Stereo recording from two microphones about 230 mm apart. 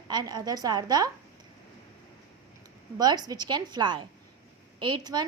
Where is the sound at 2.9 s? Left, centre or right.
Centre.